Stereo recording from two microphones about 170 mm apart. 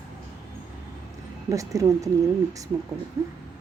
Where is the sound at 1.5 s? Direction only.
20° right (ahead or behind).